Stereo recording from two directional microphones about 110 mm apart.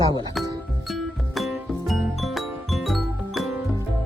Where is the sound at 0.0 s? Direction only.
45° right (ahead or behind).